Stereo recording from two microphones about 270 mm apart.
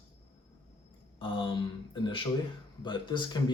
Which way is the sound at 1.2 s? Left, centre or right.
Centre.